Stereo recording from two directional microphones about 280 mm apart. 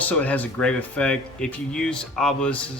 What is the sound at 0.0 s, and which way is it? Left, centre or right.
Speech, centre.